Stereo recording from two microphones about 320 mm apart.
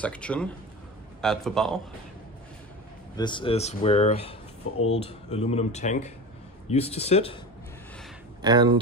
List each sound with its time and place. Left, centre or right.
0.0 s a man's voice: centre
3.2 s speech: centre
8.4 s speech: centre